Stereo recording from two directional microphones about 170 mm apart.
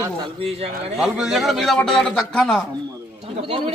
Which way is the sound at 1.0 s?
5° right (ahead or behind).